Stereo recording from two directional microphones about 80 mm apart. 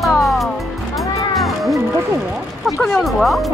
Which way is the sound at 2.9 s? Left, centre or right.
Centre.